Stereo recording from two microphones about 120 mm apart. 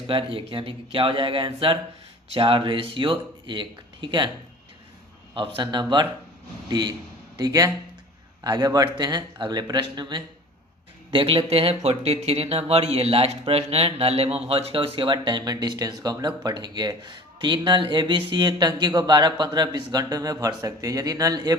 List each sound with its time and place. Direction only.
0.1 s speech: 50° right (ahead or behind)
5.3 s speech: 45° right (ahead or behind)
11.1 s speech: 50° right (ahead or behind); by 21.5 s 30° right (ahead or behind)